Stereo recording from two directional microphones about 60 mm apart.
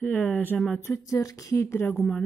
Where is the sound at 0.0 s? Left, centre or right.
Left.